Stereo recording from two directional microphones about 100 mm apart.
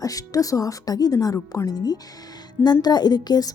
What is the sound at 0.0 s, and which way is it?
A woman's voice, 35° left (ahead or behind).